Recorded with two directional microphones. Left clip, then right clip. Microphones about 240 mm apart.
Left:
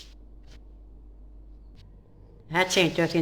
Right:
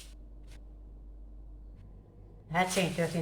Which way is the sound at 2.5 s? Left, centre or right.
Left.